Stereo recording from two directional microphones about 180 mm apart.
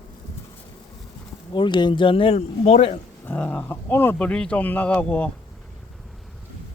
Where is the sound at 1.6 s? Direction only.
25° left (ahead or behind).